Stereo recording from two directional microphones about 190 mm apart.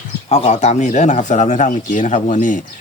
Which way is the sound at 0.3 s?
35° left (ahead or behind).